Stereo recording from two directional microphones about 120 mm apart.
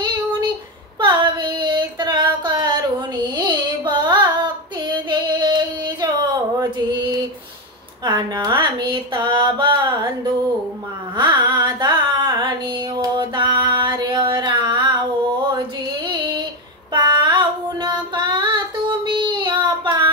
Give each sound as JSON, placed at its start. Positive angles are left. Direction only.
{"t": 0.9, "sound": "female singing", "side_deg": -40}
{"t": 3.3, "sound": "carnatic music", "side_deg": -40}
{"t": 8.0, "sound": "a sound", "side_deg": -35}
{"t": 11.1, "sound": "carnatic music", "side_deg": -40}
{"t": 16.9, "sound": "child singing", "side_deg": -40}